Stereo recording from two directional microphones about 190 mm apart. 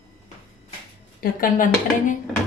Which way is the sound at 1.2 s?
45° left (ahead or behind).